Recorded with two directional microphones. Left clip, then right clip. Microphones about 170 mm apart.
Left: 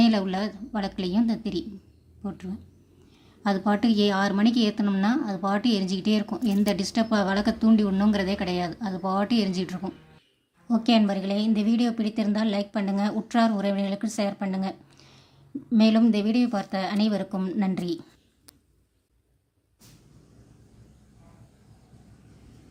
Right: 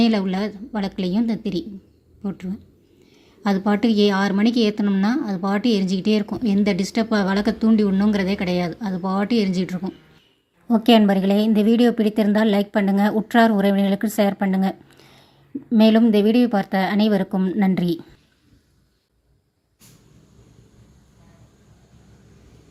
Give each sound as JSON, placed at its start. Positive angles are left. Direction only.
{"t": 0.0, "sound": "a woman's voice", "side_deg": -10}
{"t": 10.7, "sound": "a woman's voice", "side_deg": -30}